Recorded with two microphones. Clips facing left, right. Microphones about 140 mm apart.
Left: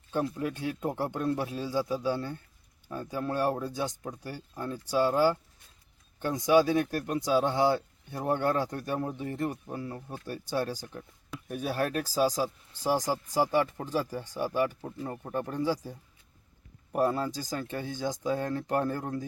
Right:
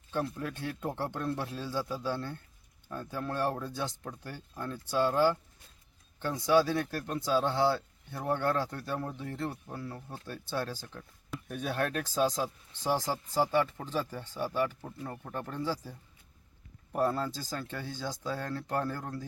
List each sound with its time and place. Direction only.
0.1 s speech: 15° left (ahead or behind)